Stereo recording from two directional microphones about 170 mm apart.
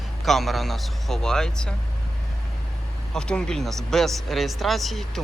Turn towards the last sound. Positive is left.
turn(degrees=0)  # may be behind; listen again after turning